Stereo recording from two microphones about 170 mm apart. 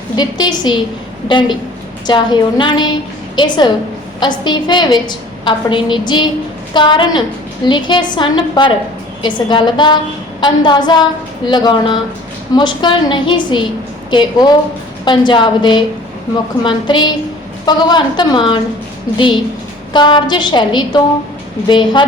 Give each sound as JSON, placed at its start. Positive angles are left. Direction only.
{"t": 0.2, "sound": "a woman's voice", "side_deg": 25}
{"t": 19.9, "sound": "a woman's voice", "side_deg": 25}